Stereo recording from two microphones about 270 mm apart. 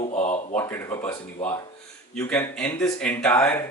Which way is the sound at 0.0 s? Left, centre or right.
Left.